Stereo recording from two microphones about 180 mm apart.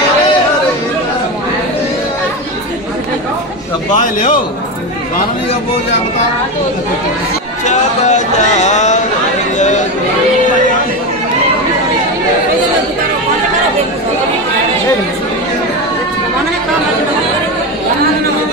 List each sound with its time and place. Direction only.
7.6 s speech: 40° left (ahead or behind)